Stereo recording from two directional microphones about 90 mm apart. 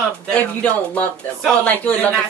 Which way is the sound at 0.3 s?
15° left (ahead or behind).